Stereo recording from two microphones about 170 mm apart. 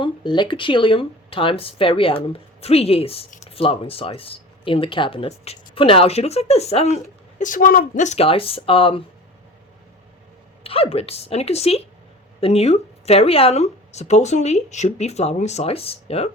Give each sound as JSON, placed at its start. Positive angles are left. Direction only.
{"t": 0.0, "sound": "speech", "side_deg": 30}
{"t": 10.6, "sound": "speech", "side_deg": 35}